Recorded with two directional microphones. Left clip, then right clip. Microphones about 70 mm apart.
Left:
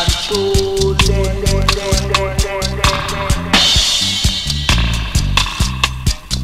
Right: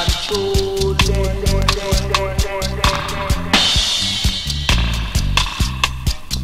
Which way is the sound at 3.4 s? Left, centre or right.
Left.